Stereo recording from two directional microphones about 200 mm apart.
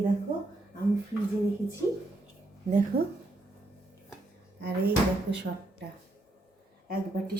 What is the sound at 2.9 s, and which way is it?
Speech, 50° right (ahead or behind).